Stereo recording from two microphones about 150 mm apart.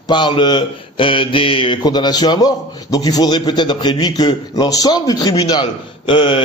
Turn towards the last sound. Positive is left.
turn(degrees=35)  # may be behind; listen again after turning